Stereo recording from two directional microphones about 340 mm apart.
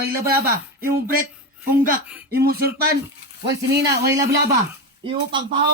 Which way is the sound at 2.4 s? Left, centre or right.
Right.